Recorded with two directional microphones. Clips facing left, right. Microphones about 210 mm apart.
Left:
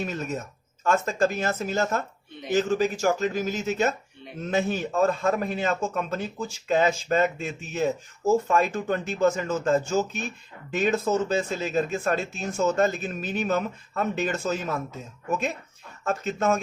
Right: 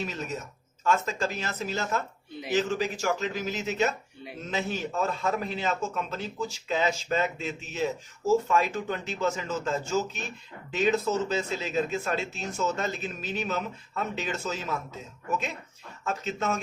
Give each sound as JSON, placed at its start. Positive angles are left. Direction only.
{"t": 0.0, "sound": "speech", "side_deg": 50}
{"t": 16.0, "sound": "speech", "side_deg": 50}